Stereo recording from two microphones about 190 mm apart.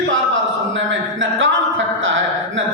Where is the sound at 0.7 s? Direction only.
80° right.